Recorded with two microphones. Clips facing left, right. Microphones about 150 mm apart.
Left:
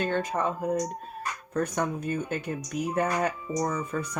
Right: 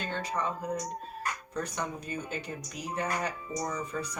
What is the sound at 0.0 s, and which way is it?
Speech, 50° left (ahead or behind).